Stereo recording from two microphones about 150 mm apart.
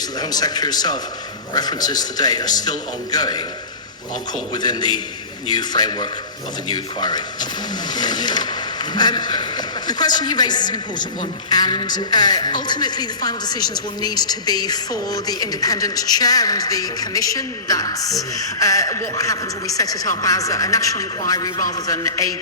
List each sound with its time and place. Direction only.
0.2 s speech: 25° left (ahead or behind)
4.5 s speech: 30° left (ahead or behind)